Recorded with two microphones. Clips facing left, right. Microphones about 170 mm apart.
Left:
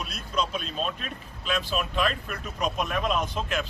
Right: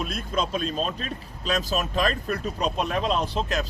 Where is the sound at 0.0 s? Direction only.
50° right (ahead or behind).